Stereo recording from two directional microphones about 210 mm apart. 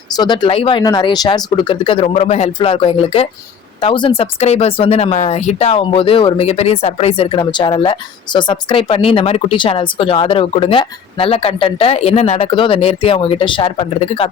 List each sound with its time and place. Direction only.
0.2 s speech: 20° left (ahead or behind)